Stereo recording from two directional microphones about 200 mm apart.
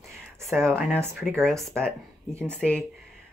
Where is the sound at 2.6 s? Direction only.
5° left (ahead or behind).